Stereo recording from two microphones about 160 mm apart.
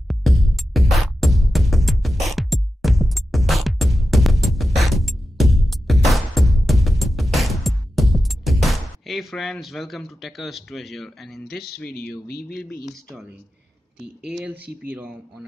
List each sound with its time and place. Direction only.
0.1 s music: centre (ahead or behind)
12.3 s speech: 70° left (ahead or behind)
14.3 s speech: 10° right (ahead or behind)